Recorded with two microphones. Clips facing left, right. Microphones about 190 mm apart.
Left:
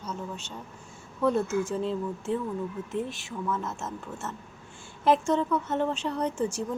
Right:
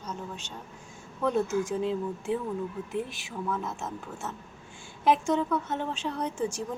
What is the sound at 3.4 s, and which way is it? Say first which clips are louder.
Speech: left 1 dB; 15° right (ahead or behind).